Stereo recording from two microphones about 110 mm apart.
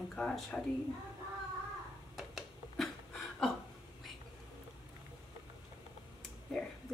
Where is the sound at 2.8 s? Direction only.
5° left (ahead or behind).